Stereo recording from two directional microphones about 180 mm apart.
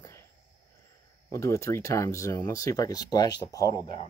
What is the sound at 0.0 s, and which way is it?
Cricket, 15° left (ahead or behind).